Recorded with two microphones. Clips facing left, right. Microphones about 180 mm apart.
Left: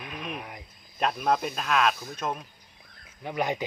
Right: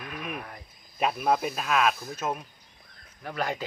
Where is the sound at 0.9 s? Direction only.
5° right (ahead or behind).